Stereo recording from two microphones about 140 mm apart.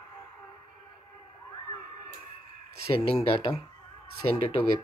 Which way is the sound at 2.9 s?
45° left (ahead or behind).